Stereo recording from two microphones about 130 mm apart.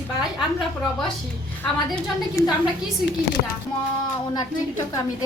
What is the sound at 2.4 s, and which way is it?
Speech, 25° left (ahead or behind).